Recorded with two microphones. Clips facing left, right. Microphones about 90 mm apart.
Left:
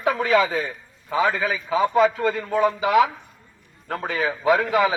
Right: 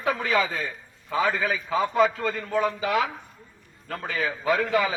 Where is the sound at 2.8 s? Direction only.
20° left (ahead or behind).